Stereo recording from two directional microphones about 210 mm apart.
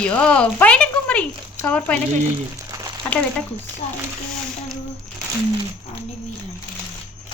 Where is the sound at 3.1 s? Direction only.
5° left (ahead or behind).